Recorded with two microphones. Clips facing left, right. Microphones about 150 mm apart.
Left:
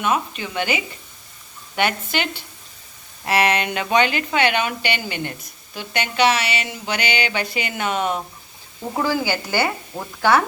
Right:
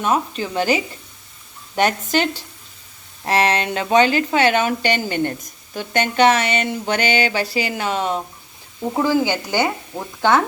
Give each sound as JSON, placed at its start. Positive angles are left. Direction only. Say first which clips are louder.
{"t": 0.0, "sound": "speech", "louder": "right 2 dB", "side_deg": -35}